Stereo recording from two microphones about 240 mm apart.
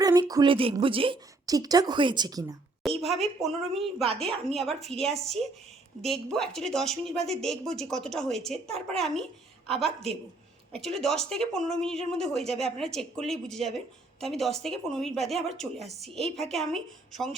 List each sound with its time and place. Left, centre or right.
0.0 s a woman's voice: centre
3.2 s a woman's voice: centre